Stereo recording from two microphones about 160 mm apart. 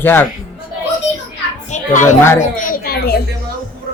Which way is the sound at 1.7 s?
50° left (ahead or behind).